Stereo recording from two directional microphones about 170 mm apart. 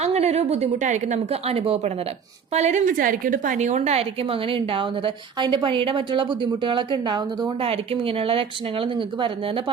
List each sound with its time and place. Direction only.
0.0 s a woman's voice: 40° right (ahead or behind)